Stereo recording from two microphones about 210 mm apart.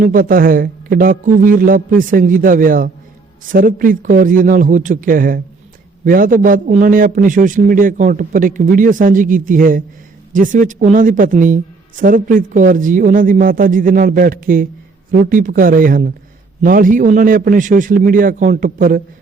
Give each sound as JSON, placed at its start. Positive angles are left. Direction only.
{"t": 0.0, "sound": "a woman's voice", "side_deg": -40}